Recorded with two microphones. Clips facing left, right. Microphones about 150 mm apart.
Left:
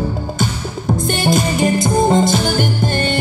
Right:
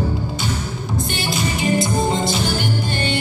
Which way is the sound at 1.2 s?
45° left (ahead or behind).